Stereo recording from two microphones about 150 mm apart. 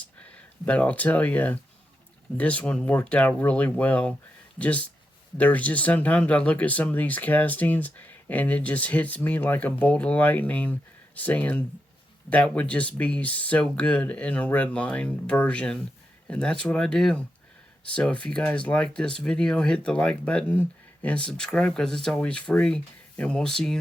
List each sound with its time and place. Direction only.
0.0 s speech: 10° left (ahead or behind)